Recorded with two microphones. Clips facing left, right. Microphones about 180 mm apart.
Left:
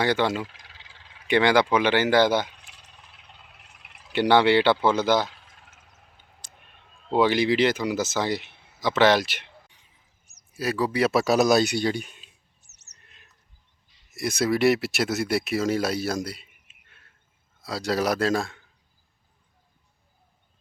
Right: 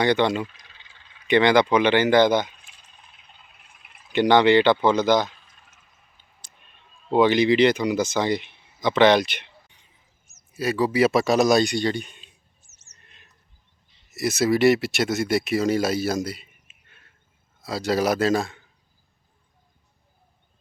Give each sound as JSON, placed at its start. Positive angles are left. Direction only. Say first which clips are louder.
{"t": 0.0, "sound": "speech", "louder": "right 3 dB", "side_deg": 5}
{"t": 0.4, "sound": "frog", "louder": "right 2 dB", "side_deg": 90}
{"t": 1.3, "sound": "speech", "louder": "right 2 dB", "side_deg": 10}
{"t": 2.6, "sound": "a sound", "louder": "left 2 dB", "side_deg": 75}
{"t": 4.1, "sound": "speech", "louder": "right 2 dB", "side_deg": 10}
{"t": 5.3, "sound": "a sound", "louder": "left 2 dB", "side_deg": 80}
{"t": 7.1, "sound": "speech", "louder": "right 3 dB", "side_deg": 5}
{"t": 9.7, "sound": "a sound", "louder": "right 1 dB", "side_deg": 0}
{"t": 10.5, "sound": "speech", "louder": "right 3 dB", "side_deg": 0}
{"t": 12.6, "sound": "bird", "louder": "right 2 dB", "side_deg": 70}
{"t": 14.1, "sound": "speech", "louder": "right 3 dB", "side_deg": -5}